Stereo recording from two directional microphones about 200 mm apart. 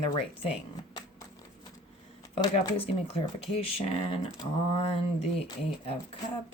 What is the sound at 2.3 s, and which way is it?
Speech, 30° left (ahead or behind).